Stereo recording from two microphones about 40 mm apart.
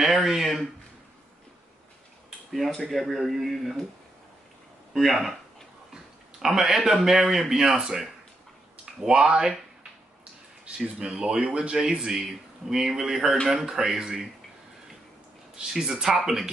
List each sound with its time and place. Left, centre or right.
0.0 s speech: centre
2.9 s speech: centre
4.9 s speech: centre
6.4 s speech: centre
10.6 s speech: right
12.0 s speech: centre
15.5 s speech: centre